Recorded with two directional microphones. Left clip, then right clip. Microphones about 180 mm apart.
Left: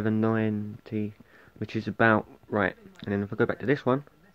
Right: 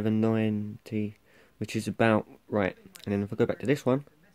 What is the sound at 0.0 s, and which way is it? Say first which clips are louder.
Speech: left 1 dB; 40° right (ahead or behind).